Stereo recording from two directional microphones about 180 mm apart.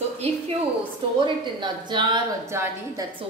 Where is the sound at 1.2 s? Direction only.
25° right (ahead or behind).